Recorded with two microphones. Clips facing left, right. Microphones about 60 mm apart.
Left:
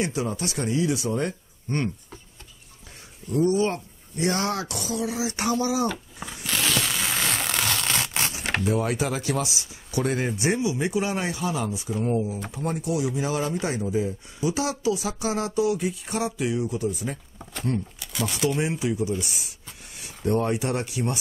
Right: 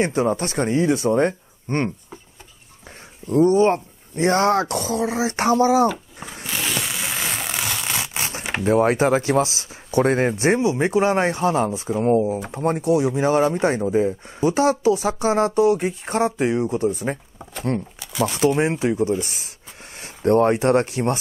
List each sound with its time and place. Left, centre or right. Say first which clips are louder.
0.0 s speech: right 7 dB; right
3.3 s speech: right 7 dB; right
6.4 s zipper: even; centre
8.6 s speech: right 10 dB; right
18.1 s speech: right 7 dB; centre
18.6 s speech: right 6 dB; right